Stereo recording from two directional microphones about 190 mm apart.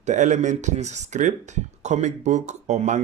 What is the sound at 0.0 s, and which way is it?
Speech, 40° right (ahead or behind).